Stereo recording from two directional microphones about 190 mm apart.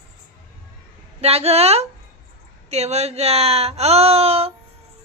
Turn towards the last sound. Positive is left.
turn(degrees=-30)  # may be behind; listen again after turning